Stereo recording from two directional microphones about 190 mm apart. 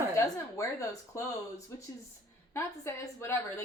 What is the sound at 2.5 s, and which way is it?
Speech, 15° left (ahead or behind).